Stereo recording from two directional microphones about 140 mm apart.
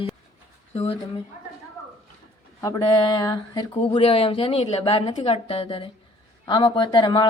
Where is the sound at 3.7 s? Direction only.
40° left (ahead or behind).